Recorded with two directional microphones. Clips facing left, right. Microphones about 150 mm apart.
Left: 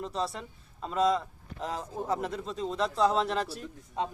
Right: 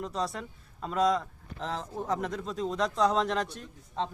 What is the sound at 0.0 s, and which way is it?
A man's voice, centre (ahead or behind).